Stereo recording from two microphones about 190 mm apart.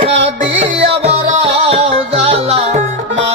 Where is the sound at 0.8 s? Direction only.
35° right (ahead or behind).